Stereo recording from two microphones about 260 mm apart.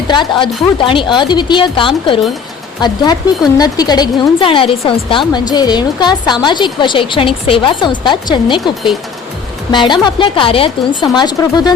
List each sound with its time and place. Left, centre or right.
0.1 s a woman's voice: centre